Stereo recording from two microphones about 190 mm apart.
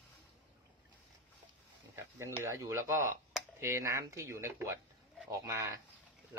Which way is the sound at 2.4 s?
15° right (ahead or behind).